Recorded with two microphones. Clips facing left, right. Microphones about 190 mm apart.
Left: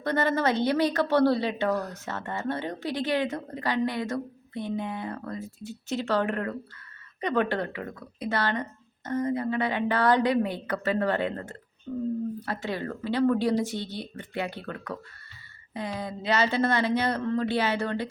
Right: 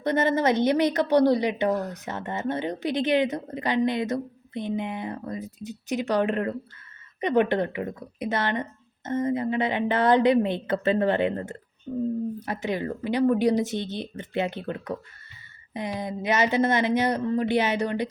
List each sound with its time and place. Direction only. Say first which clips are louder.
0.0 s a woman's voice: right 3 dB; 20° right (ahead or behind)